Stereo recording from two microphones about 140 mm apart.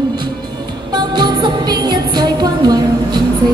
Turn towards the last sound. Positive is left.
turn(degrees=-30)  # may be behind; listen again after turning